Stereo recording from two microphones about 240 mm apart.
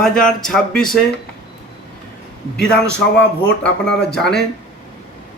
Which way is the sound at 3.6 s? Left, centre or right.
Centre.